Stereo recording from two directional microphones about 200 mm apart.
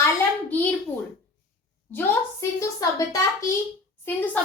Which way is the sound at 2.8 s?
15° left (ahead or behind).